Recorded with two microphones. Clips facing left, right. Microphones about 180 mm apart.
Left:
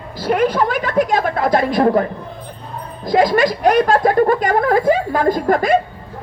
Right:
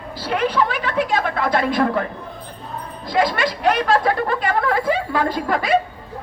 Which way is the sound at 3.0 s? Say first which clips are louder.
Left 6 dB; 45° left (ahead or behind).